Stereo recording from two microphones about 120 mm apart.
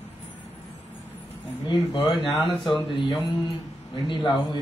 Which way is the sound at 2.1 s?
45° left (ahead or behind).